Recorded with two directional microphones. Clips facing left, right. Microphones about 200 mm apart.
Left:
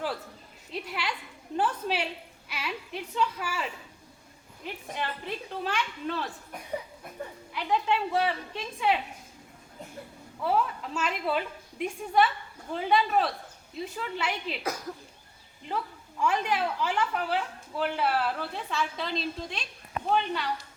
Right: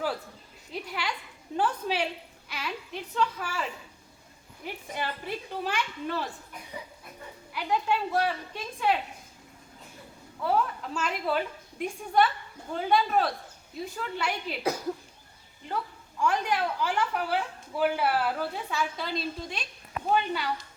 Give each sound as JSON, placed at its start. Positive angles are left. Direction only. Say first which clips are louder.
{"t": 0.7, "sound": "a sound", "louder": "even", "side_deg": 5}
{"t": 1.5, "sound": "a woman's voice", "louder": "right 1 dB", "side_deg": 5}
{"t": 4.6, "sound": "a woman's voice", "louder": "even", "side_deg": -10}
{"t": 7.5, "sound": "a woman's voice", "louder": "even", "side_deg": -5}
{"t": 10.4, "sound": "a woman's voice", "louder": "even", "side_deg": 0}
{"t": 16.2, "sound": "a woman's voice", "louder": "even", "side_deg": 5}
{"t": 17.7, "sound": "a woman's voice", "louder": "right 2 dB", "side_deg": -10}